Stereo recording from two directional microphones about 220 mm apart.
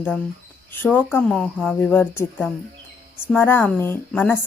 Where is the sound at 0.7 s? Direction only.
10° left (ahead or behind).